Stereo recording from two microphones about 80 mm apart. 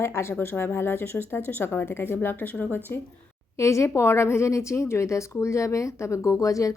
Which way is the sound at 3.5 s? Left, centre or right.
Left.